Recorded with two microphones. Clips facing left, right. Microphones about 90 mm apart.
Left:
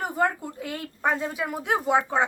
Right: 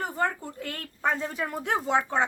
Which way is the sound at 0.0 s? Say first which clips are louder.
Left 3 dB; 10° left (ahead or behind).